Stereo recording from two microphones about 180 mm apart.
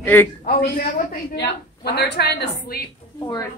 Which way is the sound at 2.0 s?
65° left (ahead or behind).